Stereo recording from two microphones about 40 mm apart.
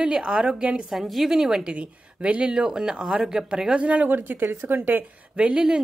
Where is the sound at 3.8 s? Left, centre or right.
Right.